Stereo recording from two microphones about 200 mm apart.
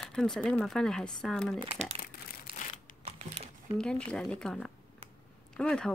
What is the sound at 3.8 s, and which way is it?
Speech, 5° left (ahead or behind).